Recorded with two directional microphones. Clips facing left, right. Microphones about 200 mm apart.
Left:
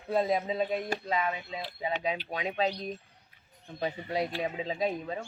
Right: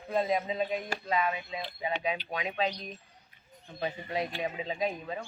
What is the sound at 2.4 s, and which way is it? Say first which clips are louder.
Speech: left 2 dB; 35° left (ahead or behind).